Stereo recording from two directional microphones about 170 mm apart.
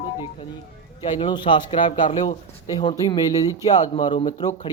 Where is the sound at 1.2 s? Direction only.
30° left (ahead or behind).